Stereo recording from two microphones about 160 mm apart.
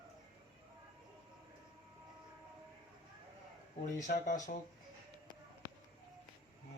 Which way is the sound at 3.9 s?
50° left (ahead or behind).